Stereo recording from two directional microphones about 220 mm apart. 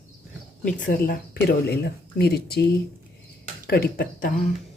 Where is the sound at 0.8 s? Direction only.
45° left (ahead or behind).